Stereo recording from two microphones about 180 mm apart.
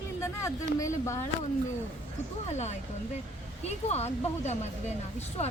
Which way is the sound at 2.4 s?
40° left (ahead or behind).